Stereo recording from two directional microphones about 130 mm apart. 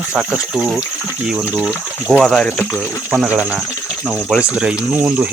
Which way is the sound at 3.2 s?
10° right (ahead or behind).